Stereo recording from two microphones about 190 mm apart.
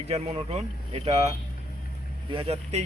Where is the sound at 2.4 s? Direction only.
30° right (ahead or behind).